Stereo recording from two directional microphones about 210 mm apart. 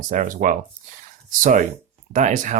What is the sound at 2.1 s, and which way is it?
Speech, 35° right (ahead or behind).